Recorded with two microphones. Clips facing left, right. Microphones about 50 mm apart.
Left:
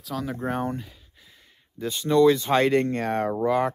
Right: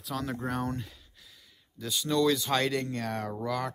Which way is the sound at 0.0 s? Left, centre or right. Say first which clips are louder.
Left 3 dB; centre.